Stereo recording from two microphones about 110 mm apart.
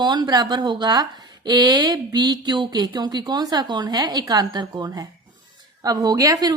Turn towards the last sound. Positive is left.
turn(degrees=-30)  # may be behind; listen again after turning